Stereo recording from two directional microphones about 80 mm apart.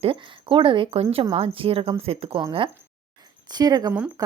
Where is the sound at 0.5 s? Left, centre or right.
Right.